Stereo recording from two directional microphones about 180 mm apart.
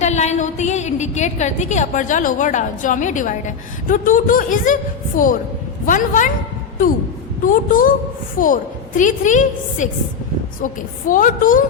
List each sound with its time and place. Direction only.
0.0 s a woman's voice: 40° left (ahead or behind)
7.4 s a woman's voice: 50° left (ahead or behind)
9.0 s a woman's voice: 45° left (ahead or behind)